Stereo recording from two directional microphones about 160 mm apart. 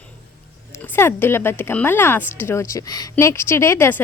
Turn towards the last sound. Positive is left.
turn(degrees=15)  # may be behind; listen again after turning